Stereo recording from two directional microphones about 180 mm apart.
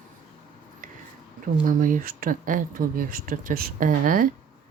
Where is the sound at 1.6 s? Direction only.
50° right (ahead or behind).